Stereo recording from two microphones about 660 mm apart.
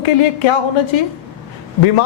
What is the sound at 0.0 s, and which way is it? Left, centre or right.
A man's voice, left.